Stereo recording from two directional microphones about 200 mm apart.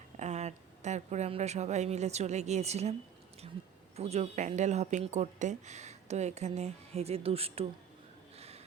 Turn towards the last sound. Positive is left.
turn(degrees=-30)  # may be behind; listen again after turning